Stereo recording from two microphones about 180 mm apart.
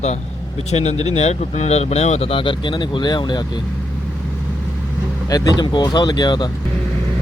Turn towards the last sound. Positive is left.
turn(degrees=25)  # may be behind; listen again after turning